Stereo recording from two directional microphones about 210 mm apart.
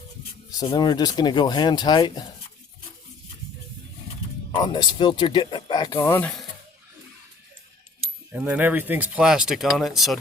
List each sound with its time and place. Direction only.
0.5 s speech: 20° left (ahead or behind)
4.5 s speech: 20° left (ahead or behind)
8.3 s speech: 5° right (ahead or behind)